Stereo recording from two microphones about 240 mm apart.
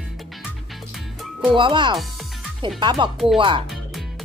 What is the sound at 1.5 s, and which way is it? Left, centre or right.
Speech, centre.